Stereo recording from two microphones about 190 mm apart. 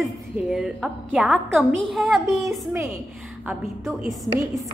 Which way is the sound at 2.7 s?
15° right (ahead or behind).